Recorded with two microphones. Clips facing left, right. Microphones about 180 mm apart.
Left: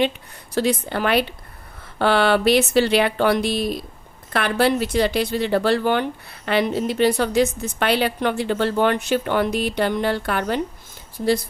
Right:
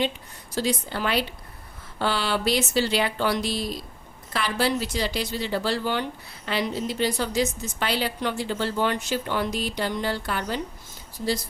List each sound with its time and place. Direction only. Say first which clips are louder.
0.5 s speech: left 5 dB; 60° left (ahead or behind)